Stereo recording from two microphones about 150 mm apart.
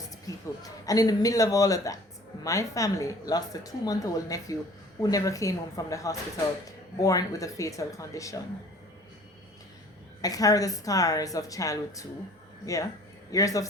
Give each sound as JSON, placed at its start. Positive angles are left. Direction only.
{"t": 0.3, "sound": "a woman's voice", "side_deg": 25}
{"t": 10.2, "sound": "a woman's voice", "side_deg": 25}